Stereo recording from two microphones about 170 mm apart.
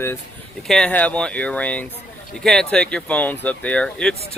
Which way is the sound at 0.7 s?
5° left (ahead or behind).